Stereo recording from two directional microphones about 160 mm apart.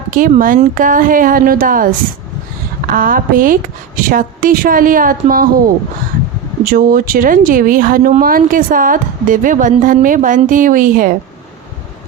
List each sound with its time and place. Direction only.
0.1 s speech: 55° right (ahead or behind)
2.9 s speech: 60° right (ahead or behind)